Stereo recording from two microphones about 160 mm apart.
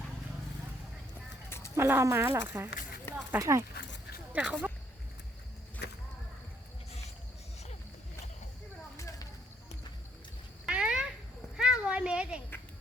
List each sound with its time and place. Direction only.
1.5 s a sound: 15° left (ahead or behind)
1.7 s speech: 15° right (ahead or behind)
3.8 s dog: 90° left
4.3 s speech: 10° right (ahead or behind)
5.8 s whip: 90° left
10.7 s cat: 5° right (ahead or behind)
11.5 s a sound: 5° right (ahead or behind)